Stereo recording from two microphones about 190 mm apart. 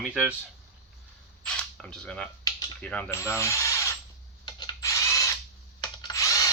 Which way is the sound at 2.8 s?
10° left (ahead or behind).